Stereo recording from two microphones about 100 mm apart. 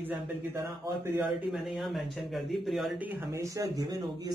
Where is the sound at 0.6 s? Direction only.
35° right (ahead or behind).